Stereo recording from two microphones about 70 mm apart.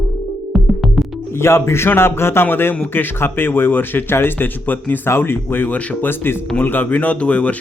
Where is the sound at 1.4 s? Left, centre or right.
Left.